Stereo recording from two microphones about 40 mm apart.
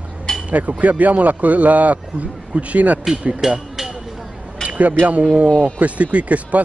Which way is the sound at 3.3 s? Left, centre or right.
Centre.